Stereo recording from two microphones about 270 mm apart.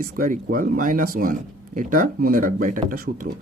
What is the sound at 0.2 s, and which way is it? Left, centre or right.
Speech, right.